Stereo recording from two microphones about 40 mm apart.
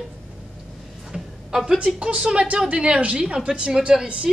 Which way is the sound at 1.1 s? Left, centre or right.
Centre.